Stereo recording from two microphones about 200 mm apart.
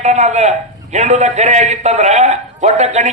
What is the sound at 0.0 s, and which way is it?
A man's voice, 35° right (ahead or behind).